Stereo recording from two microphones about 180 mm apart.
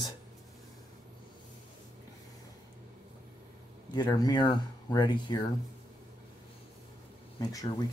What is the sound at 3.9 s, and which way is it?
Speech, 20° left (ahead or behind).